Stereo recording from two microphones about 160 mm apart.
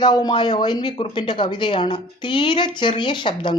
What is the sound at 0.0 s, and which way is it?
Speech, 25° left (ahead or behind).